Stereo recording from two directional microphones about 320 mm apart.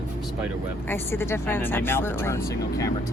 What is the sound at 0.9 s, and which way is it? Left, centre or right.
Speech, centre.